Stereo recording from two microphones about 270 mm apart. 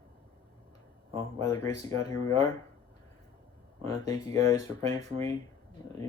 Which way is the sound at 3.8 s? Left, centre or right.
Centre.